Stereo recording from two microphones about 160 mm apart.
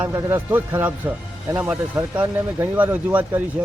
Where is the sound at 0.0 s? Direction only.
15° right (ahead or behind).